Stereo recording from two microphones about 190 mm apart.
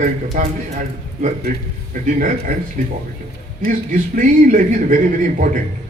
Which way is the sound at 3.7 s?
45° right (ahead or behind).